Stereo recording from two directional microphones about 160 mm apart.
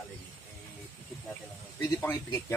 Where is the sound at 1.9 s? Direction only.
15° left (ahead or behind).